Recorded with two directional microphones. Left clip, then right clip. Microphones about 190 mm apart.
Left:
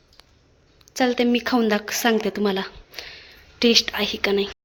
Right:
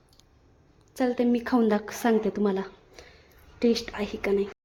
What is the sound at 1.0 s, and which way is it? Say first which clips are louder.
A woman's voice: left 5 dB; centre (ahead or behind).